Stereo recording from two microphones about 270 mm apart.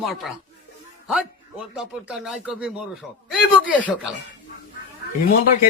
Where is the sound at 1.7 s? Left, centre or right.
Centre.